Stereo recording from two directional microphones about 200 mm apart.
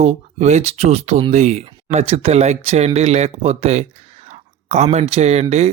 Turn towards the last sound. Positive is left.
turn(degrees=-30)  # may be behind; listen again after turning